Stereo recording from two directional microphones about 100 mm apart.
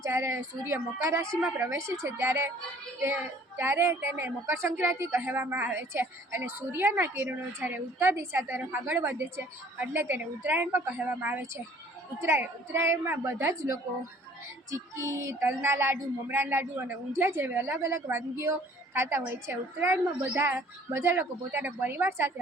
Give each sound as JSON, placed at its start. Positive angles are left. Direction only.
{"t": 0.0, "sound": "a woman's voice", "side_deg": -30}
{"t": 3.6, "sound": "a woman's voice", "side_deg": -25}